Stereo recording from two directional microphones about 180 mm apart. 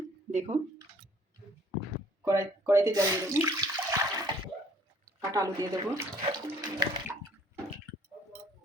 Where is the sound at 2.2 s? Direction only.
15° right (ahead or behind).